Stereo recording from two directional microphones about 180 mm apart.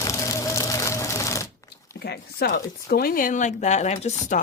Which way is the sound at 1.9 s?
60° left (ahead or behind).